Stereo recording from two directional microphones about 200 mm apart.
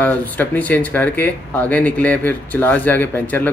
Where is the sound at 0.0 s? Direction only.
10° left (ahead or behind).